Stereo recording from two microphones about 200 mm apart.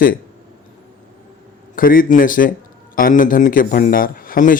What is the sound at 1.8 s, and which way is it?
Speech, 45° left (ahead or behind).